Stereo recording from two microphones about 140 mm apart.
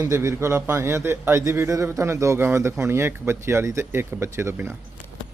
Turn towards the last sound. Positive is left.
turn(degrees=-20)  # may be behind; listen again after turning